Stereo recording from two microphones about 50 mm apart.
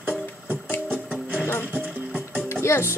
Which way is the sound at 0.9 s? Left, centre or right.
Right.